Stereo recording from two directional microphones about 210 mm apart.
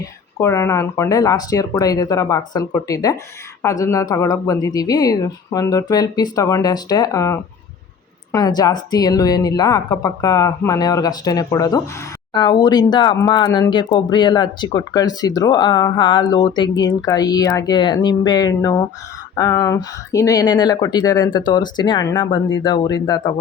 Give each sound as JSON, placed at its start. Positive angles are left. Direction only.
{"t": 0.0, "sound": "speech", "side_deg": 15}